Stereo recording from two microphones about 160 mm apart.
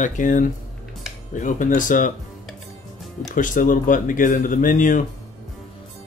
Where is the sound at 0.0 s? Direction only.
55° left (ahead or behind).